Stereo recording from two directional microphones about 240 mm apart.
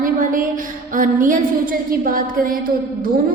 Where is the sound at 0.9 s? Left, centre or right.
Right.